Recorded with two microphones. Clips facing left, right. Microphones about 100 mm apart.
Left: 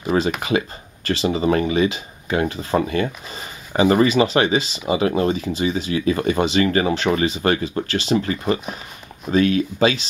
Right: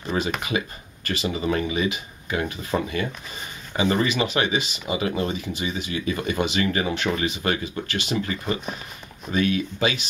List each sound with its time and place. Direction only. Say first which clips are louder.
0.4 s speech: left 6 dB; 30° left (ahead or behind)